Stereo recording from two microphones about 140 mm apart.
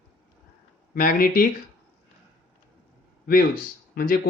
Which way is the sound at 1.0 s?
85° left.